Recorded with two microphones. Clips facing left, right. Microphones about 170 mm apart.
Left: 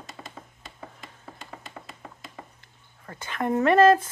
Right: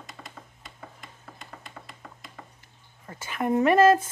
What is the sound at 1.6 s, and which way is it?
Tap, centre (ahead or behind).